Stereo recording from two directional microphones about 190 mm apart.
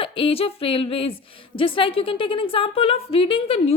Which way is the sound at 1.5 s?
25° left (ahead or behind).